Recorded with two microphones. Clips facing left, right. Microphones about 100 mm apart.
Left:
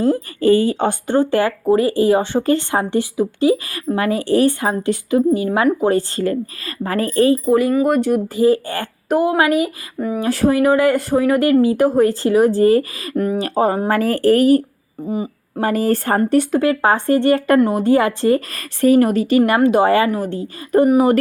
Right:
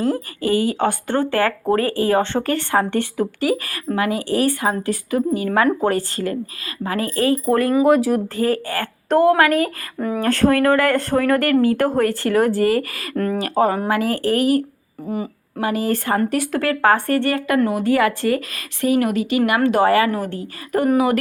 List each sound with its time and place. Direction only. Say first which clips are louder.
0.0 s speech: left 5 dB; 25° left (ahead or behind)
3.9 s speech: left 3 dB; 35° left (ahead or behind)
7.4 s speech: left 3 dB; 10° left (ahead or behind)
7.7 s speech: even; 5° right (ahead or behind)
8.4 s speech: left 5 dB; 20° left (ahead or behind)
9.0 s speech: right 1 dB; 10° left (ahead or behind); by 12.8 s 25° left (ahead or behind)
13.1 s speech: left 2 dB; 10° left (ahead or behind)
13.4 s speech: right 1 dB; 25° left (ahead or behind)
15.0 s speech: left 3 dB; 20° left (ahead or behind)
15.6 s speech: left 3 dB; 40° left (ahead or behind)
16.4 s speech: left 3 dB; 20° left (ahead or behind)
18.5 s speech: left 6 dB; 40° left (ahead or behind)
19.6 s speech: left 2 dB; 20° left (ahead or behind)